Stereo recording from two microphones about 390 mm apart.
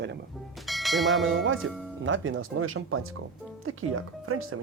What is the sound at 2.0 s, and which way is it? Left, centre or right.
Speech, right.